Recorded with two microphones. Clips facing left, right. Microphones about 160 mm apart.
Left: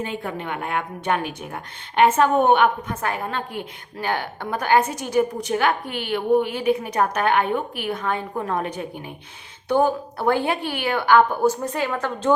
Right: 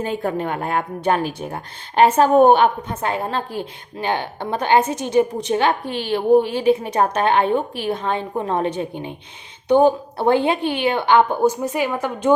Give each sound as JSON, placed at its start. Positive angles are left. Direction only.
{"t": 0.0, "sound": "a woman's voice", "side_deg": -40}